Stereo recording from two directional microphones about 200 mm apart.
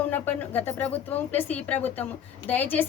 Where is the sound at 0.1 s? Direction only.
10° left (ahead or behind).